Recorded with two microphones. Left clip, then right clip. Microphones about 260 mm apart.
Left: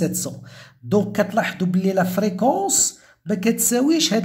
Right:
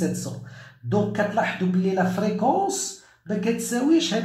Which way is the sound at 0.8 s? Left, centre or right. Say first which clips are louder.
Left 3 dB; left.